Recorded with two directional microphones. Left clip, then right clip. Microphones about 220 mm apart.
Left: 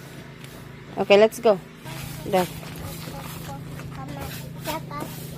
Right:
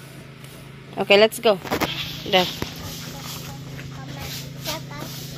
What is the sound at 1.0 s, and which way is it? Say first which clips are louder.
Speech: right 1 dB; centre (ahead or behind).